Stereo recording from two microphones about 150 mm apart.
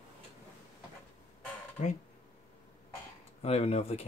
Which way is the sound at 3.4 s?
45° left (ahead or behind).